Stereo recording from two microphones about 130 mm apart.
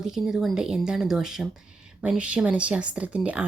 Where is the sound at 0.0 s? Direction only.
5° right (ahead or behind).